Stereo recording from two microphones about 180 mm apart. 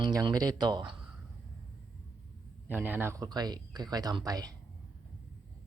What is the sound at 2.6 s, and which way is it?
Speech, 10° right (ahead or behind).